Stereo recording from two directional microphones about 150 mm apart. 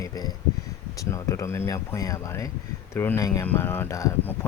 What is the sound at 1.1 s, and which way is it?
Speech, 20° left (ahead or behind).